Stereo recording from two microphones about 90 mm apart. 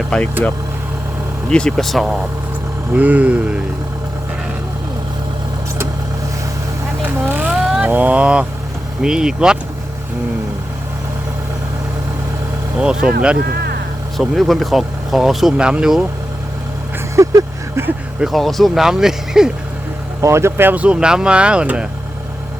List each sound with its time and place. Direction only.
0.1 s speech: 10° left (ahead or behind)
1.5 s speech: 5° left (ahead or behind)
2.9 s speech: 15° right (ahead or behind)
7.0 s vehicle: 15° right (ahead or behind)
9.0 s speech: 5° right (ahead or behind)
12.8 s speech: 10° right (ahead or behind)
14.2 s speech: centre (ahead or behind)
17.2 s vehicle: 35° right (ahead or behind)
18.2 s speech: centre (ahead or behind)
20.2 s speech: 30° right (ahead or behind); by 21.8 s 10° right (ahead or behind)